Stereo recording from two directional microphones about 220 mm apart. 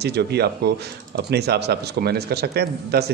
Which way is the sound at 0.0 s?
50° right (ahead or behind).